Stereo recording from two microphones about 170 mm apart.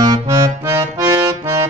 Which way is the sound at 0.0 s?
20° right (ahead or behind).